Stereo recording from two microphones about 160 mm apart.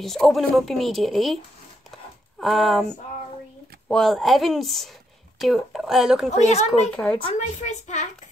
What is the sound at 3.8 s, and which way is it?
Speech, centre (ahead or behind).